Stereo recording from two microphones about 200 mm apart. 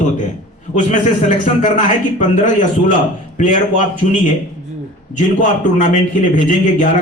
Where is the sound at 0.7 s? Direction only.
35° left (ahead or behind).